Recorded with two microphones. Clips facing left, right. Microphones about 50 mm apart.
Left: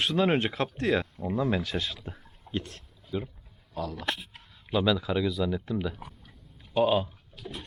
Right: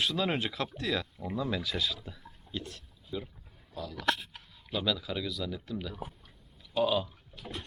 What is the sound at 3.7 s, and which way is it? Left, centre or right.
Speech, left.